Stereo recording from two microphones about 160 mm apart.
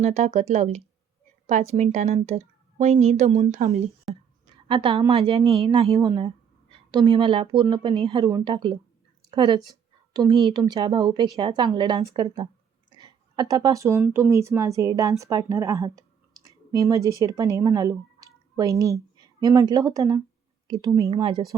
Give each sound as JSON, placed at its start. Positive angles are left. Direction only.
{"t": 0.0, "sound": "a woman's voice", "side_deg": -45}
{"t": 4.7, "sound": "a woman's voice", "side_deg": -35}
{"t": 12.9, "sound": "a sound", "side_deg": -25}
{"t": 14.0, "sound": "a woman's voice", "side_deg": -15}